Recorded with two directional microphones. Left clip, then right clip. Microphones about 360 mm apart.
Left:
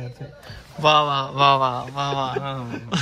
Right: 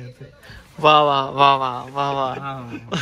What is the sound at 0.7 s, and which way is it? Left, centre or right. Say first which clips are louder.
Speech: right 3 dB; centre.